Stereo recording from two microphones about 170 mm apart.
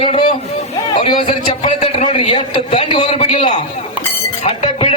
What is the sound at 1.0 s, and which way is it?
A man's voice, 30° left (ahead or behind).